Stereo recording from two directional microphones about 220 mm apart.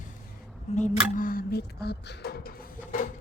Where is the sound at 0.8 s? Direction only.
35° left (ahead or behind).